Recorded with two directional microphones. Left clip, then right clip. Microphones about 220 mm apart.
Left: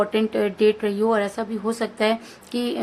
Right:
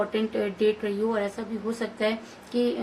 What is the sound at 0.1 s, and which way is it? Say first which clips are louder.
A woman's voice: left 5 dB; 35° left (ahead or behind).